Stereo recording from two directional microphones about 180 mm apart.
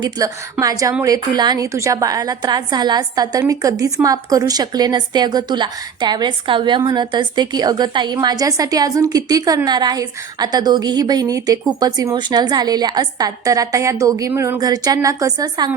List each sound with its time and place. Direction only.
0.6 s a woman's voice: 20° right (ahead or behind)